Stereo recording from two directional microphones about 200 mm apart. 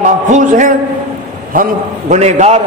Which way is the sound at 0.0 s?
40° right (ahead or behind).